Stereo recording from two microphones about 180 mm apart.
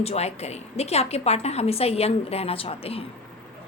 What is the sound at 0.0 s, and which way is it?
A woman's voice, 35° left (ahead or behind).